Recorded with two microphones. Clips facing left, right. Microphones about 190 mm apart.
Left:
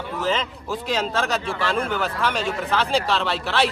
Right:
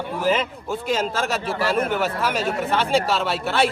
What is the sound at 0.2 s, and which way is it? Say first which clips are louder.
A man's voice: right 3 dB; 10° right (ahead or behind).